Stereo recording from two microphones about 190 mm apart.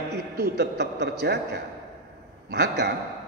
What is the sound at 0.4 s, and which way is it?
A man's voice, 60° right (ahead or behind).